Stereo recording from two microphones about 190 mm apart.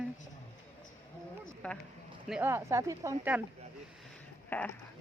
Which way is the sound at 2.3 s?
10° right (ahead or behind).